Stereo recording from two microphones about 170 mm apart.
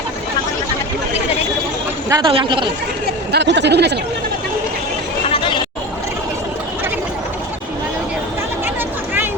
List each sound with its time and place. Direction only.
2.0 s a woman's voice: 20° right (ahead or behind)
3.3 s speech: 90° right
5.3 s chatter: 30° left (ahead or behind)